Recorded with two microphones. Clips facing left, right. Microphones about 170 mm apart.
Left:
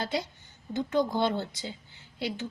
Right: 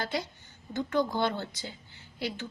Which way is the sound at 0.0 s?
20° left (ahead or behind).